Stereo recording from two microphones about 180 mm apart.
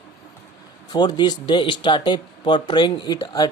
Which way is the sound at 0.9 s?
25° left (ahead or behind).